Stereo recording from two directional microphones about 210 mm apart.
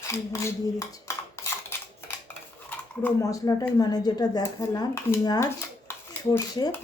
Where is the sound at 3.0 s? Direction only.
15° left (ahead or behind).